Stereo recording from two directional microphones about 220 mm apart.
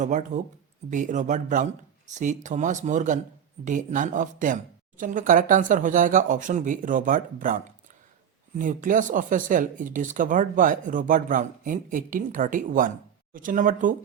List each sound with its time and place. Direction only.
0.0 s speech: 35° right (ahead or behind)